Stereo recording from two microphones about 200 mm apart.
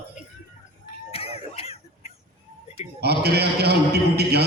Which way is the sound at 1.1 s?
30° left (ahead or behind).